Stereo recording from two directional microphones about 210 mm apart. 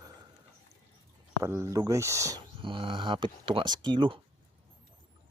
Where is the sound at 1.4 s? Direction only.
15° right (ahead or behind).